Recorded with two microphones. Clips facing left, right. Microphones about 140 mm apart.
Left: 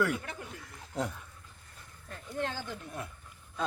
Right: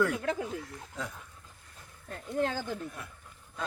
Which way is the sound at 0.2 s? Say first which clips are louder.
Right 11 dB; 90° right.